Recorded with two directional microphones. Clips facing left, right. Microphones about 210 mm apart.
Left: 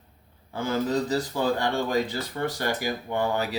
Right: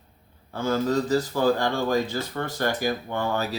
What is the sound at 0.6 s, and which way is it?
Speech, 20° left (ahead or behind).